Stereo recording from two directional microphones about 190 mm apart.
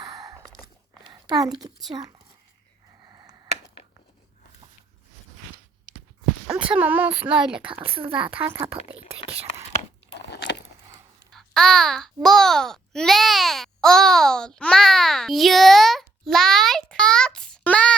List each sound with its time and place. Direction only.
0.0 s a sound: 20° right (ahead or behind)
1.9 s a child's voice: 20° right (ahead or behind)
3.1 s a sound: 20° right (ahead or behind)
6.5 s speech: 5° right (ahead or behind)
8.9 s speech: 30° right (ahead or behind)
10.2 s biting: 65° left (ahead or behind)
11.3 s a child's voice: centre (ahead or behind)